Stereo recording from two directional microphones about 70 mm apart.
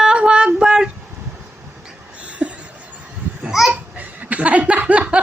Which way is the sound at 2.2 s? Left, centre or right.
Centre.